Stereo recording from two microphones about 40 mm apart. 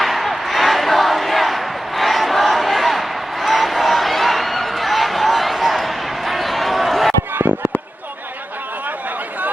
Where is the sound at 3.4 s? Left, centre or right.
Centre.